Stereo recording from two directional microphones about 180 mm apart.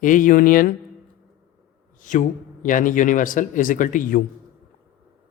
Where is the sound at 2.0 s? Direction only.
45° left (ahead or behind).